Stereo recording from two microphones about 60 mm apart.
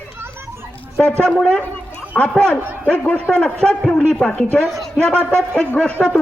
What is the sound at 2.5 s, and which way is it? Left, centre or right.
A man's voice, left.